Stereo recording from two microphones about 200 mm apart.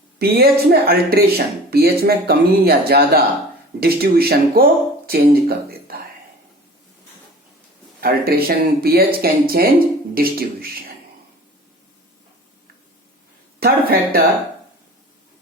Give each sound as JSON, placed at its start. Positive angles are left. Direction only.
{"t": 0.2, "sound": "speech", "side_deg": -50}
{"t": 8.0, "sound": "speech", "side_deg": -50}
{"t": 13.6, "sound": "speech", "side_deg": -50}